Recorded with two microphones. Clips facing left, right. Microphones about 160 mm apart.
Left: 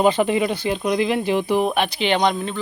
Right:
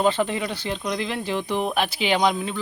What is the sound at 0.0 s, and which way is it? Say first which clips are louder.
Speech: left 5 dB; 15° left (ahead or behind).